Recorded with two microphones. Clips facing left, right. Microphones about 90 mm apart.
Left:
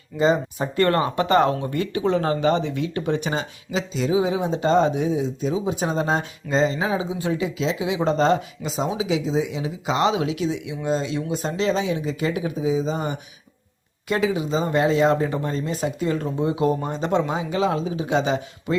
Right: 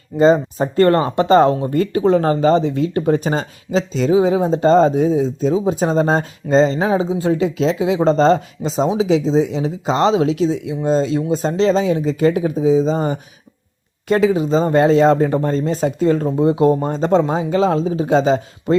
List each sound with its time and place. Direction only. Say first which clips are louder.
0.2 s speech: right 7 dB; 40° right (ahead or behind)